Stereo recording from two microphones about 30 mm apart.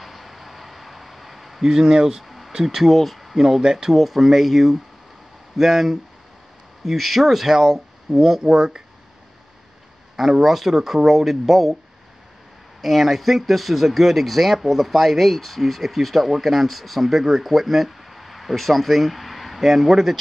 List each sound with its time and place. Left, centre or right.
0.0 s a sound: centre
1.7 s speech: right
2.2 s a sound: centre
2.5 s speech: centre
2.9 s speech: centre
3.3 s speech: centre
8.4 s speech: right
10.4 s speech: centre
12.8 s speech: centre